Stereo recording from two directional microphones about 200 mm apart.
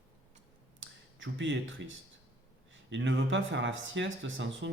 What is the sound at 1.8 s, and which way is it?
Speech, 65° right (ahead or behind).